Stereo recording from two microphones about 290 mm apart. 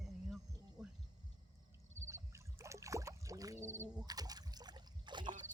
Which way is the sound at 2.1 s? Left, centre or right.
Centre.